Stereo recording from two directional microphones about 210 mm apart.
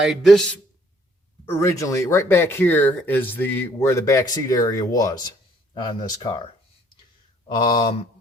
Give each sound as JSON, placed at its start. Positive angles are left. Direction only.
{"t": 0.0, "sound": "a man's voice", "side_deg": 0}
{"t": 1.5, "sound": "speech", "side_deg": 15}